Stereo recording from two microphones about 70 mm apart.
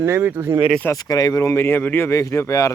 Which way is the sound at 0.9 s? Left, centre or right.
Left.